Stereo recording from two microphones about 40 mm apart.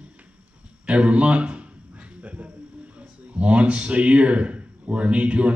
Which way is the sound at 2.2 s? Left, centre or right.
Right.